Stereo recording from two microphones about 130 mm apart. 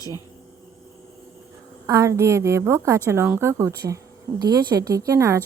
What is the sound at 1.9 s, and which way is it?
A woman's voice, 20° right (ahead or behind).